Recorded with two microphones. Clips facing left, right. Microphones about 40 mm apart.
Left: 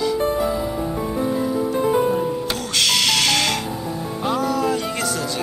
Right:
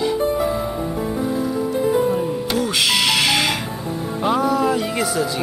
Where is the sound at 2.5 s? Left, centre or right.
Centre.